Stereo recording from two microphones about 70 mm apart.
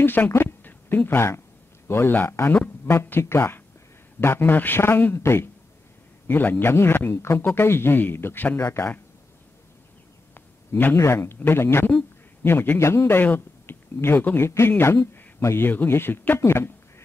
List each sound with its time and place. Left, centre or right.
0.0 s speech: left
6.2 s a man's voice: left
10.3 s a sound: left
11.0 s speech: left